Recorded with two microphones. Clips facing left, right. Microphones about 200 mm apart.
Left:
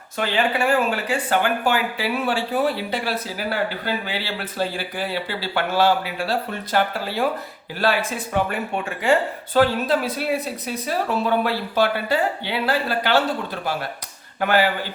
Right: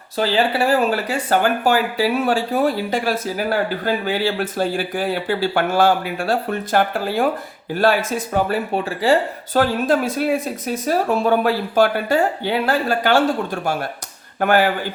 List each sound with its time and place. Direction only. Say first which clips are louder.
0.2 s speech: right 4 dB; 35° right (ahead or behind)
9.6 s speech: right 1 dB; 45° right (ahead or behind)
14.4 s speech: right 3 dB; 50° right (ahead or behind)